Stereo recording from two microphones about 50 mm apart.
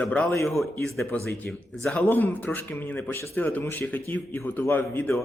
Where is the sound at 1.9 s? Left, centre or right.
Left.